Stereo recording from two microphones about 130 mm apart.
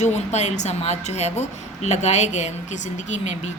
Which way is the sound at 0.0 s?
60° left (ahead or behind).